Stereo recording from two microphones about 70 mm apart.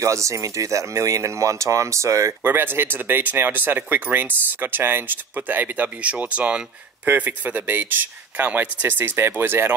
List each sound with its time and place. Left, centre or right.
0.0 s speech: right
2.4 s speech: right